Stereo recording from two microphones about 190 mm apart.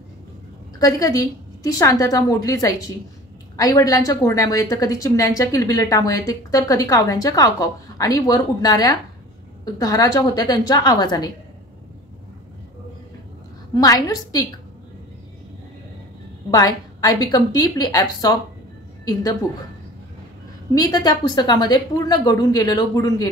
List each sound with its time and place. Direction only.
0.7 s a woman's voice: 20° left (ahead or behind)
13.7 s a woman's voice: 20° left (ahead or behind)
16.4 s a woman's voice: 20° left (ahead or behind)
20.7 s a woman's voice: 20° left (ahead or behind)